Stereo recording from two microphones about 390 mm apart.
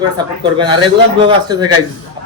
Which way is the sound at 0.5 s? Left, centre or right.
Centre.